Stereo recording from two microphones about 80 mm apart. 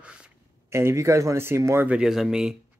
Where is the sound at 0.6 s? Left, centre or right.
Right.